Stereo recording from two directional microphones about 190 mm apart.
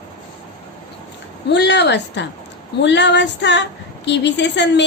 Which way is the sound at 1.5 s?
65° left (ahead or behind).